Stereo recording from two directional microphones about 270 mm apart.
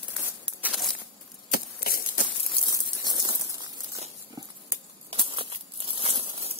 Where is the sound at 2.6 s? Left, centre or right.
Centre.